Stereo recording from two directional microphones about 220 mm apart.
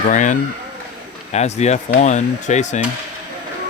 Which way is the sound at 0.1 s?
35° left (ahead or behind).